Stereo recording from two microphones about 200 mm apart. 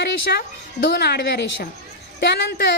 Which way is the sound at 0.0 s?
55° left (ahead or behind).